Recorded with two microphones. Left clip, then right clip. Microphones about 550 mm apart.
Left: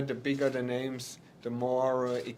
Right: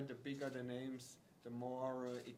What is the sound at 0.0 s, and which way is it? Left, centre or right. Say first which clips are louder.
Speech: left 16 dB; left.